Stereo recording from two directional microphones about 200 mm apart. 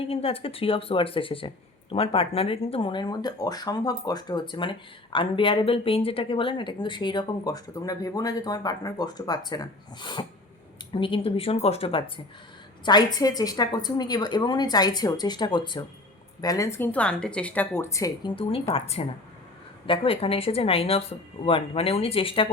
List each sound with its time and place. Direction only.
0.0 s a woman's voice: 30° left (ahead or behind)
18.7 s speech: 30° left (ahead or behind)